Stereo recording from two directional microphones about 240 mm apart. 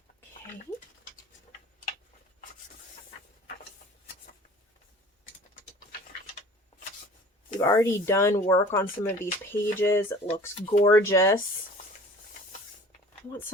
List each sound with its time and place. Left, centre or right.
7.6 s speech: centre
10.7 s speech: left
10.9 s speech: centre